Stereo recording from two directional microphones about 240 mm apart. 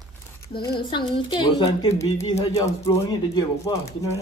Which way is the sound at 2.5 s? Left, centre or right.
Centre.